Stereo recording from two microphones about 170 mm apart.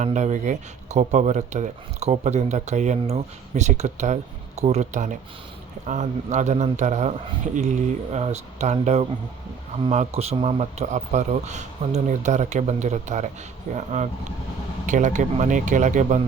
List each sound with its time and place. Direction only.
0.0 s speech: 45° right (ahead or behind)
8.1 s speech: 40° right (ahead or behind)